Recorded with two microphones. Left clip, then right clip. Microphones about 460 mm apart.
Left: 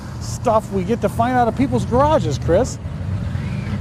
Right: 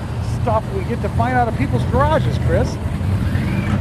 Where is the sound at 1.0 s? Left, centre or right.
Left.